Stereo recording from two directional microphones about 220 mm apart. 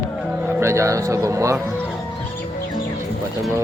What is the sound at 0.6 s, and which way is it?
Speech, 10° right (ahead or behind).